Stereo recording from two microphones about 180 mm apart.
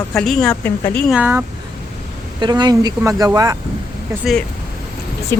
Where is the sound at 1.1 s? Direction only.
10° right (ahead or behind).